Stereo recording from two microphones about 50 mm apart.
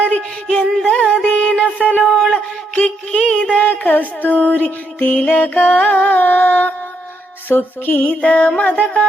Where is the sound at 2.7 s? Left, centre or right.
Left.